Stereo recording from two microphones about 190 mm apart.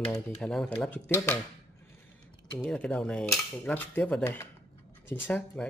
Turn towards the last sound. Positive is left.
turn(degrees=5)  # may be behind; listen again after turning